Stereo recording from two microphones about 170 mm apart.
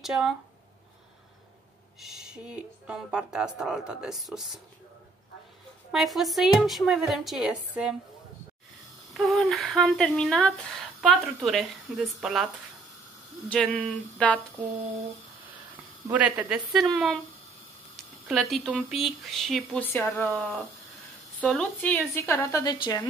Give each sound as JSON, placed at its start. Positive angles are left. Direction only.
{"t": 0.0, "sound": "speech", "side_deg": -5}
{"t": 2.0, "sound": "speech", "side_deg": -5}
{"t": 5.9, "sound": "speech", "side_deg": 0}
{"t": 9.1, "sound": "speech", "side_deg": 0}
{"t": 13.5, "sound": "a sound", "side_deg": 10}
{"t": 15.7, "sound": "speech", "side_deg": -10}
{"t": 18.2, "sound": "speech", "side_deg": 0}
{"t": 19.8, "sound": "a sound", "side_deg": 10}
{"t": 20.2, "sound": "a woman's voice", "side_deg": 0}